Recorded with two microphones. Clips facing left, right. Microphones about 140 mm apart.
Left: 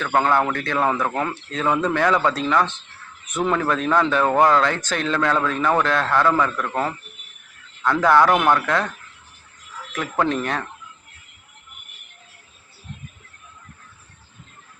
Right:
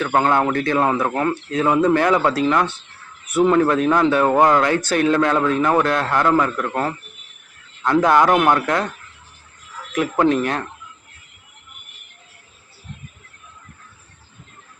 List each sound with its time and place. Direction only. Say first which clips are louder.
0.0 s a man's voice: right 2 dB; 15° right (ahead or behind)
7.8 s a man's voice: right 1 dB; 20° right (ahead or behind)
9.9 s a man's voice: right 5 dB; 10° right (ahead or behind)